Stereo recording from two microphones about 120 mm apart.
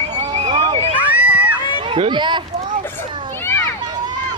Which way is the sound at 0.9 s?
10° right (ahead or behind).